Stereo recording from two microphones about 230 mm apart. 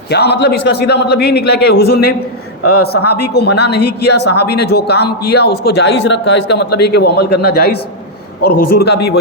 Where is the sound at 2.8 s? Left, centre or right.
Left.